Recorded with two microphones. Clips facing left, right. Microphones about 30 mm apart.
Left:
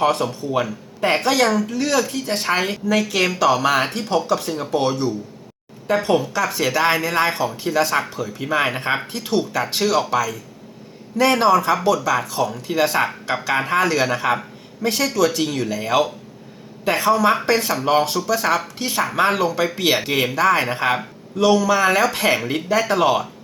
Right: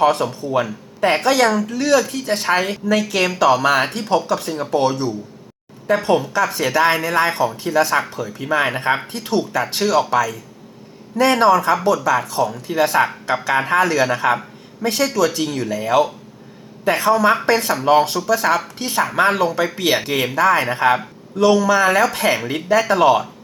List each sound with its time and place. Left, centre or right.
0.0 s speech: centre
11.2 s speech: centre
12.7 s speech: left
13.0 s speech: centre
15.7 s speech: centre
16.9 s speech: centre
19.5 s speech: centre